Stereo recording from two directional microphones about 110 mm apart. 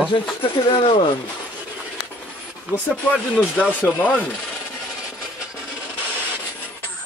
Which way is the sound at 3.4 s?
15° left (ahead or behind).